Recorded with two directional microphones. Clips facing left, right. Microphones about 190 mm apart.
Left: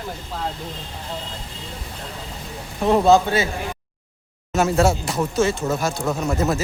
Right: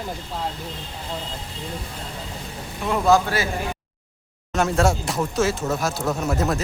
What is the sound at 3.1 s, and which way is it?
Speech, 20° left (ahead or behind).